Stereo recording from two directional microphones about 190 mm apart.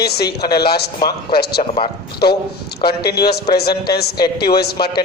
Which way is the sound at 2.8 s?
55° left (ahead or behind).